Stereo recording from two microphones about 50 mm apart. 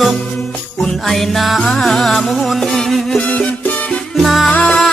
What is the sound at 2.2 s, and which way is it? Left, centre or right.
Music, centre.